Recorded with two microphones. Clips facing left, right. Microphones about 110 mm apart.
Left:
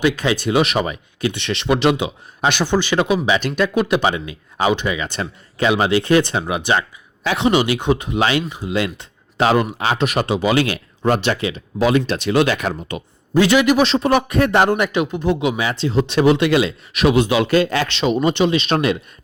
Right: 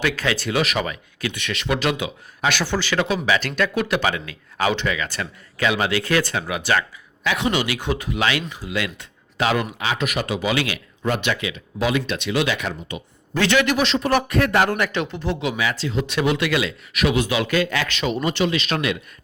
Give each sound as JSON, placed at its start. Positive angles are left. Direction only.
{"t": 0.0, "sound": "speech", "side_deg": 20}
{"t": 13.3, "sound": "a man's voice", "side_deg": 10}